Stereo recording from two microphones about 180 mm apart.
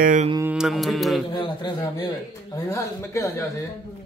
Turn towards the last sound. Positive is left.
turn(degrees=15)  # may be behind; listen again after turning